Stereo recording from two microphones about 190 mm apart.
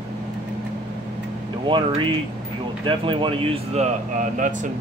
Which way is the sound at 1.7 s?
25° right (ahead or behind).